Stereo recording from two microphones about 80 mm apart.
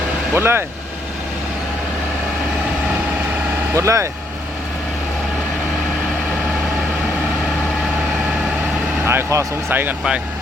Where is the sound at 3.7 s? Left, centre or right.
Right.